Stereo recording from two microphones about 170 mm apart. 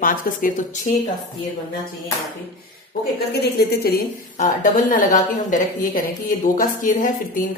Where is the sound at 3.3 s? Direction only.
65° left (ahead or behind).